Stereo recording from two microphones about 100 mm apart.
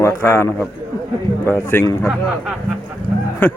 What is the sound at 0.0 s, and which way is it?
A man's voice, 25° left (ahead or behind).